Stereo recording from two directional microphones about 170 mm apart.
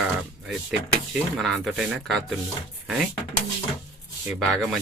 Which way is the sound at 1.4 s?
Centre (ahead or behind).